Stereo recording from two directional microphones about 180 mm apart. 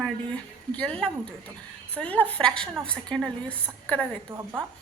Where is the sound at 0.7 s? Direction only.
5° left (ahead or behind).